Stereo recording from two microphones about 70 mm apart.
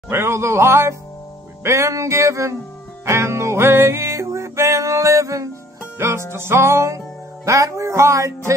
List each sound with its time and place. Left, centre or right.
0.1 s music: right
5.9 s music: right